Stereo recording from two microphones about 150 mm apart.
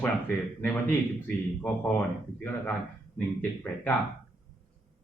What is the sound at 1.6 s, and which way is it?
Speech, 10° left (ahead or behind).